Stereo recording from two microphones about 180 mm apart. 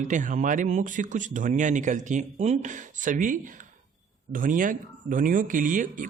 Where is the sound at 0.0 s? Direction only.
45° right (ahead or behind).